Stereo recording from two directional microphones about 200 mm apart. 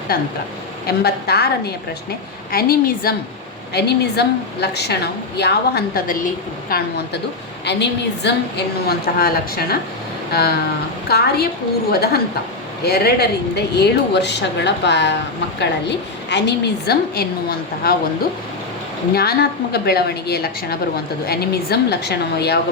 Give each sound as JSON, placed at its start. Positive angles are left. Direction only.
{"t": 0.9, "sound": "a woman's voice", "side_deg": 55}
{"t": 11.1, "sound": "a woman's voice", "side_deg": 50}
{"t": 19.1, "sound": "a woman's voice", "side_deg": 50}